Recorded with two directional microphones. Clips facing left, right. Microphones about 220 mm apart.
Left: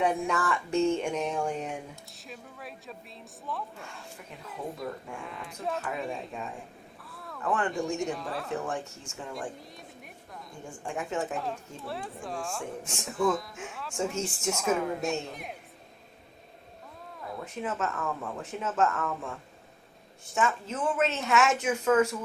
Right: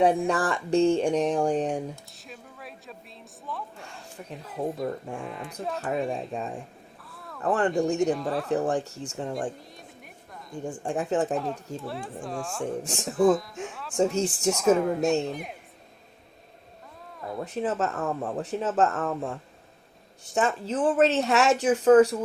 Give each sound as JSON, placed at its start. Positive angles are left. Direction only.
{"t": 0.0, "sound": "a man's voice", "side_deg": -35}
{"t": 2.1, "sound": "a man's voice", "side_deg": 0}
{"t": 5.8, "sound": "a man's voice", "side_deg": -35}
{"t": 7.0, "sound": "a sound", "side_deg": 0}
{"t": 7.4, "sound": "a man's voice", "side_deg": -35}
{"t": 7.7, "sound": "a man's voice", "side_deg": 0}
{"t": 8.5, "sound": "a man's voice", "side_deg": -35}
{"t": 10.8, "sound": "a man's voice", "side_deg": -35}
{"t": 11.9, "sound": "a man's voice", "side_deg": 0}
{"t": 12.8, "sound": "a man's voice", "side_deg": -40}
{"t": 13.1, "sound": "a man's voice", "side_deg": 0}
{"t": 17.4, "sound": "a man's voice", "side_deg": -35}